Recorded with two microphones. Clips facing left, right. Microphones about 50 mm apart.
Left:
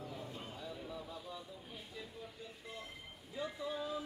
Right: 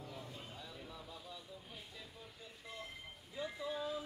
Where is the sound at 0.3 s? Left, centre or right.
Left.